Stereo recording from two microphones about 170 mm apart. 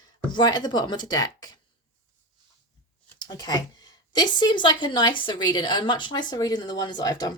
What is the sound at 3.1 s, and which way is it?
A woman's voice, 25° left (ahead or behind).